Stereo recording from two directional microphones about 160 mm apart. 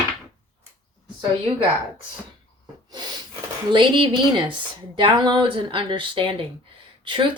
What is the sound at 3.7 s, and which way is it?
Speech, 30° right (ahead or behind).